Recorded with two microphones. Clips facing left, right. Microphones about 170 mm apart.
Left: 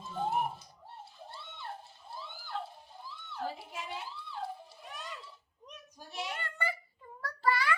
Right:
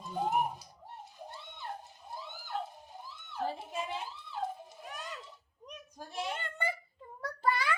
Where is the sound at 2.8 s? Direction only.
20° right (ahead or behind).